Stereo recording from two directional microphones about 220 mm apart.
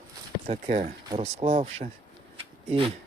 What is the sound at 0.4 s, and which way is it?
Speech, 30° right (ahead or behind).